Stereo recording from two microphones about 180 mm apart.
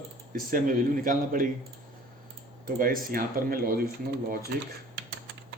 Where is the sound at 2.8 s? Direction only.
50° right (ahead or behind).